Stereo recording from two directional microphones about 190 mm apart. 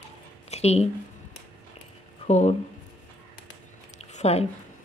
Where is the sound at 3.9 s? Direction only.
35° left (ahead or behind).